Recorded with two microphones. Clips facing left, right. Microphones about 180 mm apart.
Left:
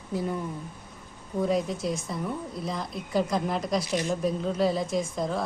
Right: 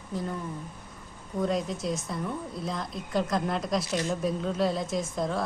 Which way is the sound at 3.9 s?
15° left (ahead or behind).